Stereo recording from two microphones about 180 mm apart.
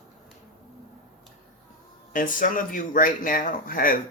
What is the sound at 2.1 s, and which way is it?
Speech, 50° left (ahead or behind).